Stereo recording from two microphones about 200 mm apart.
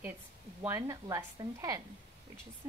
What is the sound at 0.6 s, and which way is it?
Speech, 15° right (ahead or behind).